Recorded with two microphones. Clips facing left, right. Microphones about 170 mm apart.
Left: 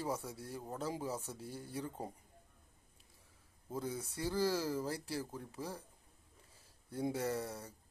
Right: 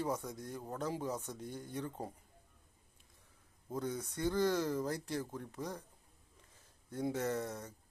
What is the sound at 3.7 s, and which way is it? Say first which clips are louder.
Speech: right 2 dB; 10° left (ahead or behind).